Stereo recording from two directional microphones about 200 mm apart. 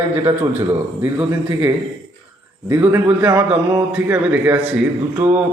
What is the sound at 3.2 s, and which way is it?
A man's voice, 15° right (ahead or behind).